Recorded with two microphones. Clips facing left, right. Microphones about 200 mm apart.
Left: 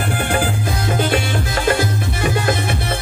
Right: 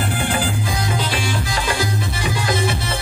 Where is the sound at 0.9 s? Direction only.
55° left (ahead or behind).